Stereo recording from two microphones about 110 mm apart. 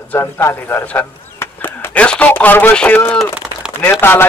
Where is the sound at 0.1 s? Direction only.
25° left (ahead or behind).